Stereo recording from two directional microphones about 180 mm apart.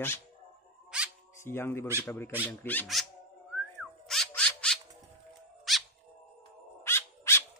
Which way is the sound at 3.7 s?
Centre (ahead or behind).